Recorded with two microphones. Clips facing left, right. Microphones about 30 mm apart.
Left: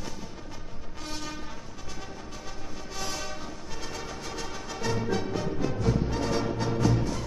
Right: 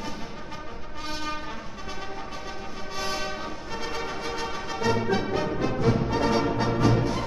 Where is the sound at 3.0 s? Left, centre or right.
Right.